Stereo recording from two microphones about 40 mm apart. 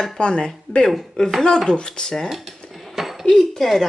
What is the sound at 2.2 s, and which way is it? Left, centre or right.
Speech, centre.